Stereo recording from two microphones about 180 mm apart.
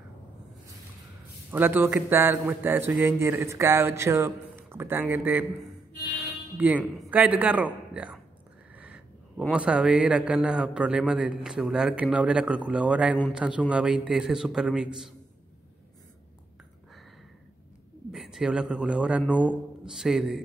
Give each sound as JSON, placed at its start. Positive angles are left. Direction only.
{"t": 1.5, "sound": "speech", "side_deg": -10}
{"t": 8.7, "sound": "a sound", "side_deg": -5}
{"t": 9.5, "sound": "a man's voice", "side_deg": -5}
{"t": 18.1, "sound": "a man's voice", "side_deg": -5}